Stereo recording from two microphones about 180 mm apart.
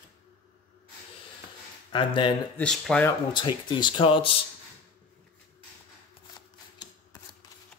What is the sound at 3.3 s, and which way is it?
Speech, 25° left (ahead or behind).